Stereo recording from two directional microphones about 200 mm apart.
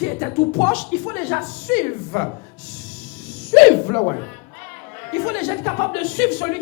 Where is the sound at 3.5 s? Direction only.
5° left (ahead or behind).